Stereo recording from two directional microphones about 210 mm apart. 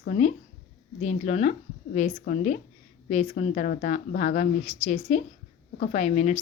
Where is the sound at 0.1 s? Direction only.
30° left (ahead or behind).